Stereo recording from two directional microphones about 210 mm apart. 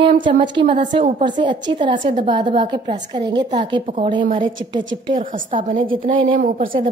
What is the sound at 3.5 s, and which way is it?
Speech, 25° right (ahead or behind).